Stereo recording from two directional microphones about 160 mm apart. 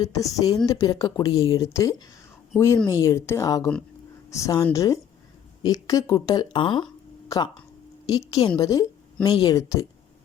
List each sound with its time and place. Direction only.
0.0 s a woman's voice: 20° left (ahead or behind)